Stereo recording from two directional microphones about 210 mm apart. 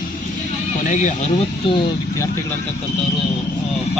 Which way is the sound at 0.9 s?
35° left (ahead or behind).